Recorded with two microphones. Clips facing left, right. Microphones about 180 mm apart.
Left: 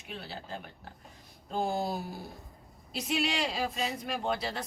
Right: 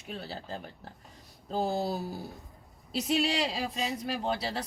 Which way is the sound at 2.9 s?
35° right (ahead or behind).